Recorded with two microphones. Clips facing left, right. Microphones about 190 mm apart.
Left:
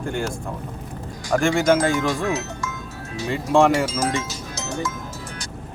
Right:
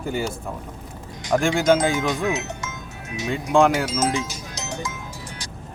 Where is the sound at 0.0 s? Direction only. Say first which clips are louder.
Even; 5° right (ahead or behind).